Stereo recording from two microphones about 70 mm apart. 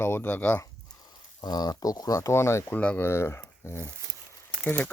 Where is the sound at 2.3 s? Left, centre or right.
Left.